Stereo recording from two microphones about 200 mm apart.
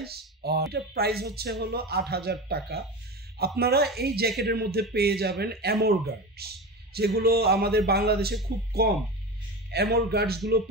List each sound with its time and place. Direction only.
0.0 s speech: 55° right (ahead or behind)